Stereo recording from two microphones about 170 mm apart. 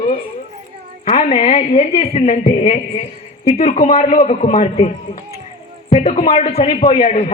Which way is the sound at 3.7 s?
50° left (ahead or behind).